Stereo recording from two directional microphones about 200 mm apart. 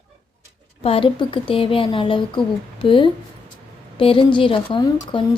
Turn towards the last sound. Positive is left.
turn(degrees=25)  # may be behind; listen again after turning